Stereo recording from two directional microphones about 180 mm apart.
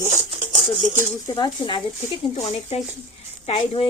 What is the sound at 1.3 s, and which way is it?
Speech, 25° left (ahead or behind).